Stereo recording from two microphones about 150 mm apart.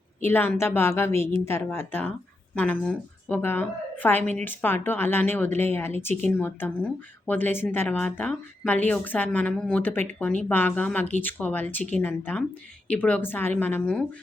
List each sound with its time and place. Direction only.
0.2 s speech: 15° left (ahead or behind)